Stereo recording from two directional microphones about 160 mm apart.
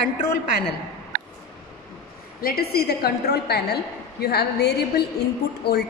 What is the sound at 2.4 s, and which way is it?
A woman's voice, 70° left (ahead or behind).